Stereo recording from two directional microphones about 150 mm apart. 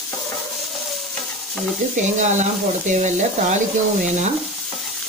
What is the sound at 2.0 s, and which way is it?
Speech, 50° right (ahead or behind).